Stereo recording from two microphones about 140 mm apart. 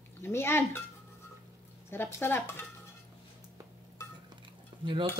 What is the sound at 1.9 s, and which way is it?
Speech, 15° left (ahead or behind).